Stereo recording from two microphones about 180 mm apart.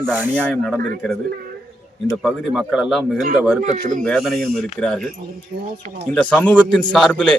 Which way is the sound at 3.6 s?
45° right (ahead or behind).